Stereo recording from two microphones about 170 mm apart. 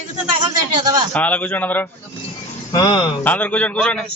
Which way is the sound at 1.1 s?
10° left (ahead or behind).